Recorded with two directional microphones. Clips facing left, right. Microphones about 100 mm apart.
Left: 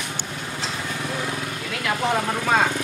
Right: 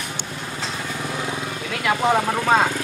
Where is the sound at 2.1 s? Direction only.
25° right (ahead or behind).